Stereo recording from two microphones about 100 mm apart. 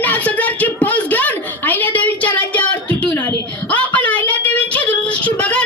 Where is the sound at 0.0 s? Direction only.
15° left (ahead or behind).